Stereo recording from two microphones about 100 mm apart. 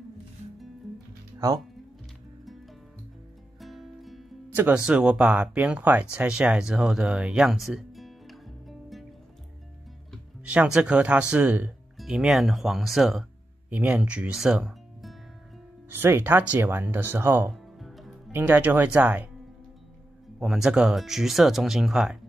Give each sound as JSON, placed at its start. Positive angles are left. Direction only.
{"t": 3.6, "sound": "music", "side_deg": 0}
{"t": 4.6, "sound": "speech", "side_deg": -15}
{"t": 10.4, "sound": "speech", "side_deg": -15}
{"t": 12.0, "sound": "speech", "side_deg": -5}
{"t": 13.7, "sound": "speech", "side_deg": -15}
{"t": 15.9, "sound": "speech", "side_deg": -20}
{"t": 17.5, "sound": "music", "side_deg": 0}
{"t": 18.3, "sound": "speech", "side_deg": -20}
{"t": 20.3, "sound": "speech", "side_deg": -5}